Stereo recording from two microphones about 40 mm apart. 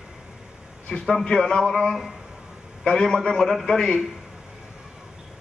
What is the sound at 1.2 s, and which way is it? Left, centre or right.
Speech, centre.